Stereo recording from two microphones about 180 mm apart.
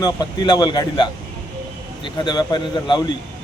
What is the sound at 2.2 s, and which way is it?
Speech, 25° left (ahead or behind).